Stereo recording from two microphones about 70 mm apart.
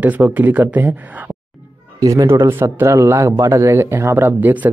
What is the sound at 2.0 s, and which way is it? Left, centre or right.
Speech, right.